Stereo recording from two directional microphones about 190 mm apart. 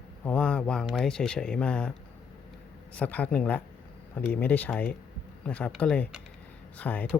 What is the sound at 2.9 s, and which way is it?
Speech, 10° left (ahead or behind).